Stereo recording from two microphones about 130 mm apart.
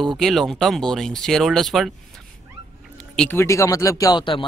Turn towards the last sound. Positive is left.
turn(degrees=40)  # may be behind; listen again after turning